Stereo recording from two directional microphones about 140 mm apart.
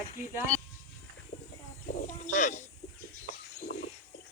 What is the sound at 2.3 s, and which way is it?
Speech, 55° left (ahead or behind).